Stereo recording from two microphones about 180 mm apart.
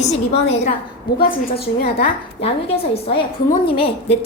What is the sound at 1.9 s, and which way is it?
A woman's voice, 30° left (ahead or behind).